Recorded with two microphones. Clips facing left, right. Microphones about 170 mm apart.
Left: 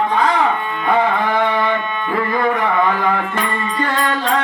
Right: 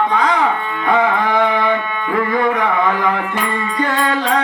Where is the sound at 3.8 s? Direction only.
20° right (ahead or behind).